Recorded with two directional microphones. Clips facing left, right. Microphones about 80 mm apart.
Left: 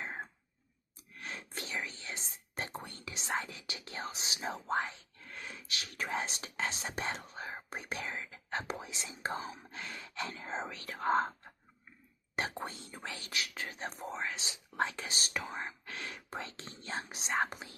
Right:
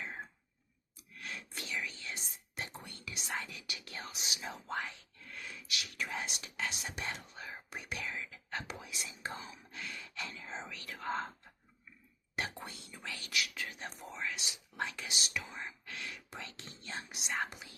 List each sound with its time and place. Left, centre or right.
0.0 s throat clearing: left
0.9 s whispering: left
10.3 s whispering: left